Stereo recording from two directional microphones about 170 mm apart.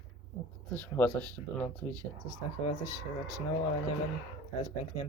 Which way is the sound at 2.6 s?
25° left (ahead or behind).